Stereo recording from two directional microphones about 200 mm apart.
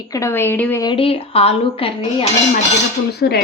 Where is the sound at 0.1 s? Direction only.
15° left (ahead or behind).